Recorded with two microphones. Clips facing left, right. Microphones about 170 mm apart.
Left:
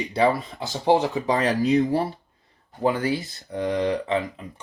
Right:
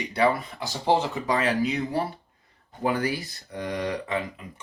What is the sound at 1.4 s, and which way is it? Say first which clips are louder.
Speech: left 7 dB; 35° left (ahead or behind).